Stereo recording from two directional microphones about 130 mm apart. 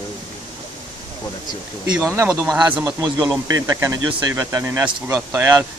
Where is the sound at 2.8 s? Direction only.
30° right (ahead or behind).